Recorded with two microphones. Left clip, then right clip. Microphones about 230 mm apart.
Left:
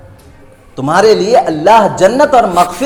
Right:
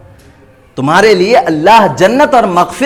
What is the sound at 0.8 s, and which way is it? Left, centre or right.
A man's voice, right.